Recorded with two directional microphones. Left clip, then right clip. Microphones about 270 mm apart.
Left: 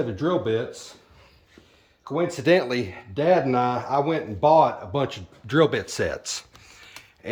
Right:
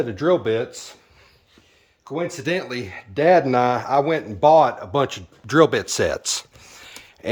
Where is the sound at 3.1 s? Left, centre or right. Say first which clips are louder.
Right 5 dB; centre.